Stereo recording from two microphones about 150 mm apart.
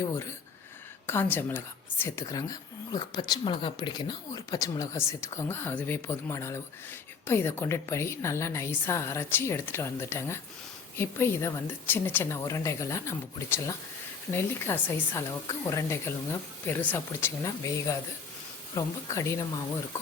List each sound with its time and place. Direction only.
1.0 s speech: 15° left (ahead or behind)